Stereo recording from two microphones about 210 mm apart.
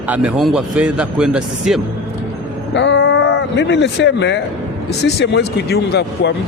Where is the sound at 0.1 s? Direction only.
5° right (ahead or behind).